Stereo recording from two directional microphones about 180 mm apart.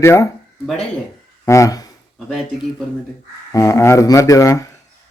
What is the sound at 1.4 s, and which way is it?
Speech, 20° left (ahead or behind).